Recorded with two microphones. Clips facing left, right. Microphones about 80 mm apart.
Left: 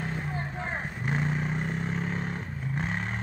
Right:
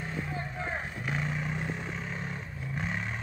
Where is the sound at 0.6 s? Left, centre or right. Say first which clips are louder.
Left 1 dB; left.